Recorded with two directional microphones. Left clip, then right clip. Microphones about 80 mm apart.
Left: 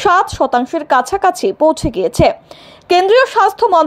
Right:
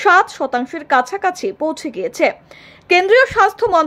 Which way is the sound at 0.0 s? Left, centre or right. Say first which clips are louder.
Left 1 dB; left.